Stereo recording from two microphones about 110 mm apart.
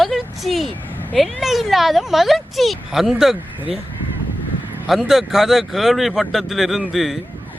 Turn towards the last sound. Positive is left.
turn(degrees=0)  # may be behind; listen again after turning